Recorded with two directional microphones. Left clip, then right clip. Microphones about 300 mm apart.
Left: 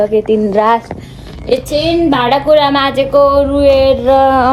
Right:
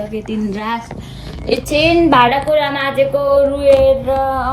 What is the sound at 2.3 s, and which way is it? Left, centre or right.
A woman's voice, centre.